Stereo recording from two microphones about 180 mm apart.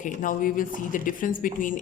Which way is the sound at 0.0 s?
45° left (ahead or behind).